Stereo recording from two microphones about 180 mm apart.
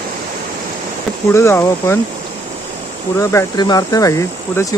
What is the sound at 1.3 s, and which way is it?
Speech, 15° left (ahead or behind).